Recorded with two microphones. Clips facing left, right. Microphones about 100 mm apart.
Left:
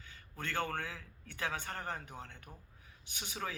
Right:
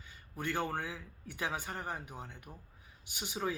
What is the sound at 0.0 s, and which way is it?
A man's voice, 15° right (ahead or behind).